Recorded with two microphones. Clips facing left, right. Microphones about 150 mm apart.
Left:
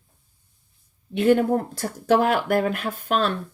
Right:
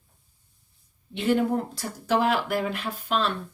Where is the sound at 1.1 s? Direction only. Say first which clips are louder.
Left 5 dB; 55° left (ahead or behind).